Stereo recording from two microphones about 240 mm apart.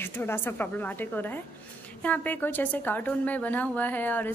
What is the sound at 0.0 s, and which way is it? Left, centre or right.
A woman's voice, centre.